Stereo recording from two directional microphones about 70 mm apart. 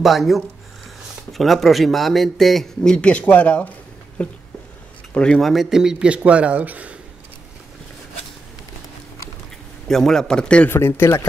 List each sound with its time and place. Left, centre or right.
0.0 s a man's voice: centre
4.2 s a sound: left
5.1 s speech: centre
5.4 s speech: centre; by 7.0 s right
9.8 s a man's voice: centre
10.7 s speech: left